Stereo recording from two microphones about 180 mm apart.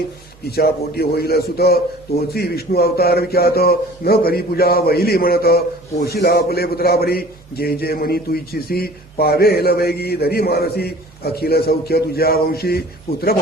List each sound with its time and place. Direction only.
0.4 s speech: 60° left (ahead or behind)